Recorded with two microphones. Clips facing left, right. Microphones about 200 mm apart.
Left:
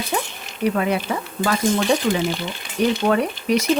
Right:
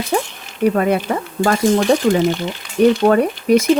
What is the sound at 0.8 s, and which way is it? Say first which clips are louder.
Speech: right 5 dB; 45° right (ahead or behind).